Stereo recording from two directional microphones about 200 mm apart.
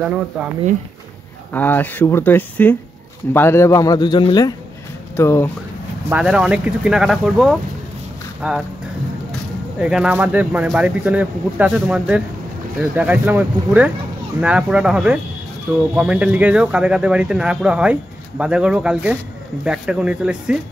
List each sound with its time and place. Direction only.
0.0 s speech: 5° right (ahead or behind)
1.5 s a man's voice: 10° left (ahead or behind)
6.0 s speech: 5° right (ahead or behind)
9.8 s speech: 5° right (ahead or behind)